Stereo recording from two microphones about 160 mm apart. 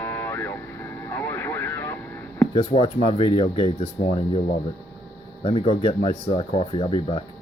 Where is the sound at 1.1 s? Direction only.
15° left (ahead or behind).